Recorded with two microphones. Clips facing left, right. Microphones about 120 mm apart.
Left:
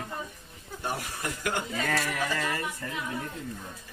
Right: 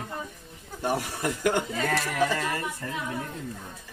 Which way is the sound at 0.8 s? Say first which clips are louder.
Right 6 dB; 70° right (ahead or behind).